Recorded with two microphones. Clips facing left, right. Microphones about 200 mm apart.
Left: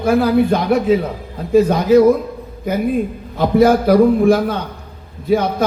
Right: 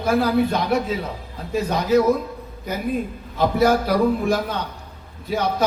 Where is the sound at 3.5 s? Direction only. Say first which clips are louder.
Left 8 dB; 50° left (ahead or behind).